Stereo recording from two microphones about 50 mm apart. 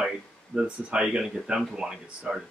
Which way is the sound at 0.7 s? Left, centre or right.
Centre.